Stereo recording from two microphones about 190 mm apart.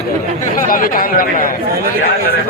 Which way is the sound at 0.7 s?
50° left (ahead or behind).